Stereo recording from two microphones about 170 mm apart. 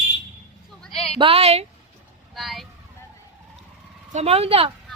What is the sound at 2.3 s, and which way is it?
Speech, centre (ahead or behind).